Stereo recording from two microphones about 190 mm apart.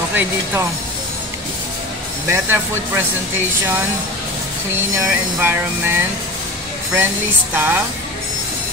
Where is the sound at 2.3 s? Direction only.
10° right (ahead or behind).